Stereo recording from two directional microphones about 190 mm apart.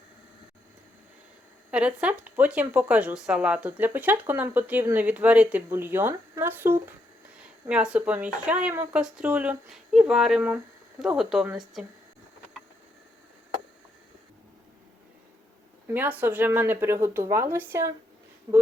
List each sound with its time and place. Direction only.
1.7 s speech: 5° right (ahead or behind)
15.9 s speech: 10° right (ahead or behind)